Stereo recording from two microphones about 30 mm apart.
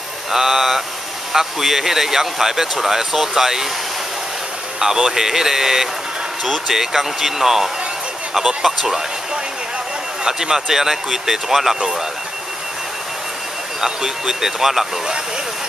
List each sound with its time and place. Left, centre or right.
0.3 s speech: centre
4.7 s speech: centre
10.2 s speech: centre
13.7 s speech: centre